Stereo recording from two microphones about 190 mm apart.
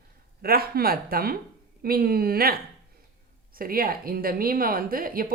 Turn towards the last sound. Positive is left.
turn(degrees=-50)  # may be behind; listen again after turning